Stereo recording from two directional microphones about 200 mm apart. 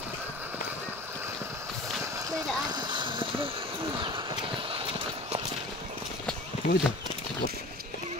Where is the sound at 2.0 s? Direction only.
15° right (ahead or behind).